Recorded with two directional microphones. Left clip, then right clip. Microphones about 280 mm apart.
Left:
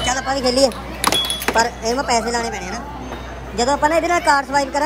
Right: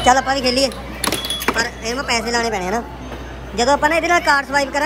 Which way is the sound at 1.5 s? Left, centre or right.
Centre.